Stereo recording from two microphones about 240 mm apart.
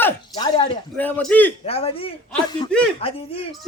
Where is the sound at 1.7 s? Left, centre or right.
Left.